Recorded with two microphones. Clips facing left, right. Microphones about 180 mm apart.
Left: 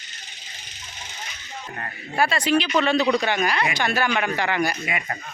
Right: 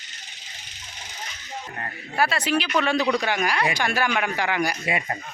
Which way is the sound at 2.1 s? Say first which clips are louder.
Left 2 dB; 5° right (ahead or behind).